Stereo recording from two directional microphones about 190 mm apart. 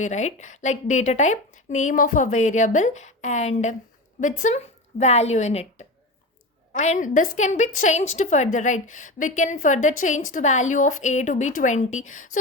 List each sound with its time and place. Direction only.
0.0 s a woman's voice: 40° left (ahead or behind)